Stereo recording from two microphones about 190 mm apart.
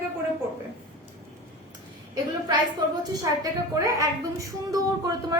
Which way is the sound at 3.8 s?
15° right (ahead or behind).